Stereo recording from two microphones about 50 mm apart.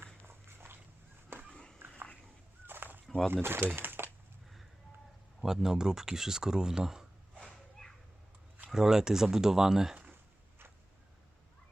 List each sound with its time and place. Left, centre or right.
0.0 s dog: right
1.5 s a sound: centre
2.6 s fowl: right
3.4 s speech: right
5.4 s speech: centre
7.8 s a sound: centre
8.7 s speech: centre